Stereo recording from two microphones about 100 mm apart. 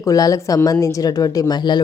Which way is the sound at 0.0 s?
35° left (ahead or behind).